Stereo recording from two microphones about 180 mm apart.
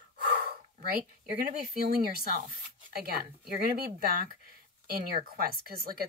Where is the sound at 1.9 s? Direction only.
55° right (ahead or behind).